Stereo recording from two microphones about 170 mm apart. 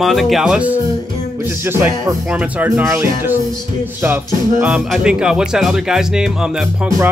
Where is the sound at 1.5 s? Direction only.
10° right (ahead or behind).